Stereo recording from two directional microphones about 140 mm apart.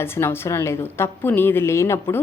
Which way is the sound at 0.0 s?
15° left (ahead or behind).